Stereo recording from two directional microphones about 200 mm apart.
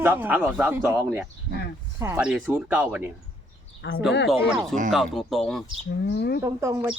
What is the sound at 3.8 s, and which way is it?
Speech, 60° left (ahead or behind).